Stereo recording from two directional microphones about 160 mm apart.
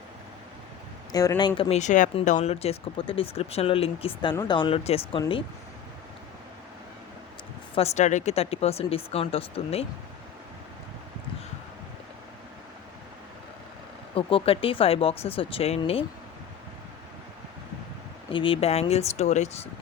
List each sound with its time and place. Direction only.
1.1 s speech: 20° left (ahead or behind)
1.8 s speech: 50° left (ahead or behind)
7.8 s speech: 45° left (ahead or behind)
14.2 s speech: 35° left (ahead or behind)
18.3 s speech: 35° left (ahead or behind)